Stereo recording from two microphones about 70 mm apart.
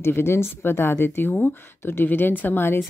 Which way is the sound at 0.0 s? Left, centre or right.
Left.